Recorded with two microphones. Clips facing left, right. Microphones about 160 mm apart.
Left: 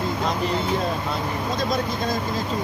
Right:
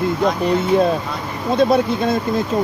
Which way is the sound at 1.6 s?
60° right (ahead or behind).